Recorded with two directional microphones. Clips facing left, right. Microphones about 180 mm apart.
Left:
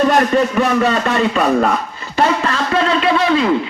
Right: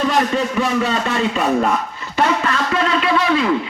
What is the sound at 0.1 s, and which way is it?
A man's voice, 55° left (ahead or behind).